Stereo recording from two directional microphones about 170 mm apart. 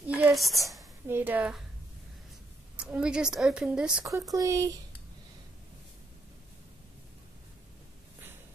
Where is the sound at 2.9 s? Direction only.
5° right (ahead or behind).